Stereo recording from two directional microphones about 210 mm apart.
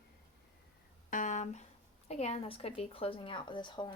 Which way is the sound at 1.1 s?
35° left (ahead or behind).